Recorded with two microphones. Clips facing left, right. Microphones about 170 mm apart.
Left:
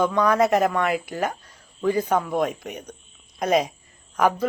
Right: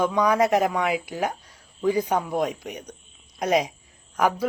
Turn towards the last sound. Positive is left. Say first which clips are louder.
# left 2 dB
turn(degrees=-10)  # may be behind; listen again after turning